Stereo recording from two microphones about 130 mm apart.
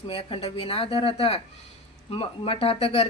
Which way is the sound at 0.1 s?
45° left (ahead or behind).